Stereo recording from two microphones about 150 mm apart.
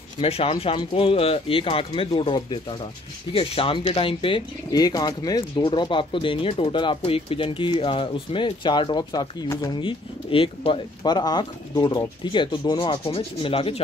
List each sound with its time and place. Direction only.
0.2 s speech: 40° left (ahead or behind)